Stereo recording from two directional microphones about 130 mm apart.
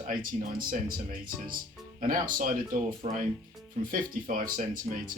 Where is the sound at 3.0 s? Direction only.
50° right (ahead or behind).